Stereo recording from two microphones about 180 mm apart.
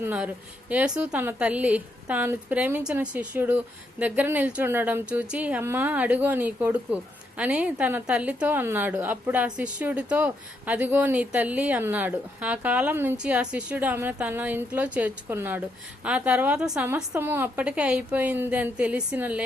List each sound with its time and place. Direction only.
0.0 s a woman's voice: 10° right (ahead or behind)